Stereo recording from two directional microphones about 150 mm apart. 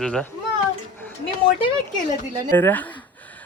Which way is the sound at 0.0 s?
5° left (ahead or behind).